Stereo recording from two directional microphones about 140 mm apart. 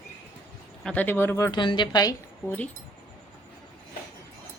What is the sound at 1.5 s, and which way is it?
Speech, 35° left (ahead or behind).